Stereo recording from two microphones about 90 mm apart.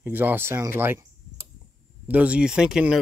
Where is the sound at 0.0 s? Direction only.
20° right (ahead or behind).